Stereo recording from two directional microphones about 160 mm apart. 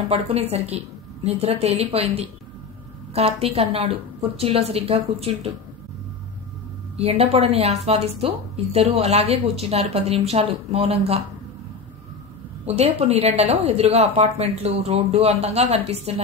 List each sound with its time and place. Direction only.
0.1 s a woman's voice: 40° right (ahead or behind)
7.0 s a woman's voice: 40° right (ahead or behind)
12.6 s a woman's voice: 45° right (ahead or behind)